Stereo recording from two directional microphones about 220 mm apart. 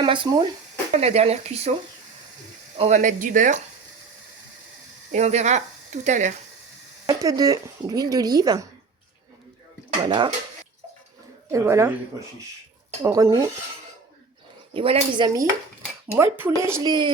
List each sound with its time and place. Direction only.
0.0 s speech: 20° right (ahead or behind)
2.7 s speech: 30° right (ahead or behind)
5.1 s speech: 30° right (ahead or behind)
7.1 s speech: 15° right (ahead or behind)
10.0 s speech: 20° right (ahead or behind)
11.5 s speech: 10° right (ahead or behind)
13.0 s speech: 15° right (ahead or behind)
14.7 s speech: 25° right (ahead or behind)
16.1 s speech: 10° right (ahead or behind)